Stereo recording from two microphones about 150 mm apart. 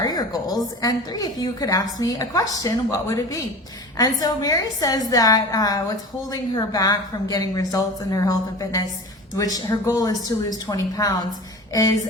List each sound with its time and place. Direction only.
0.0 s a woman's voice: 25° left (ahead or behind)